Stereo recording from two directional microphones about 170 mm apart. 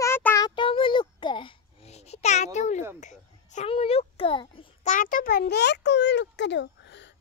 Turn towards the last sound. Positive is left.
turn(degrees=90)